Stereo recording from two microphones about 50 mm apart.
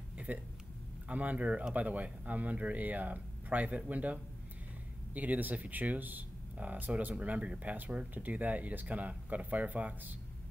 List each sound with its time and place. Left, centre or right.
0.3 s speech: right